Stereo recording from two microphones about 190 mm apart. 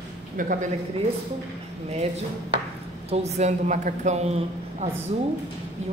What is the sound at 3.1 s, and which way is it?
A woman's voice, 35° right (ahead or behind).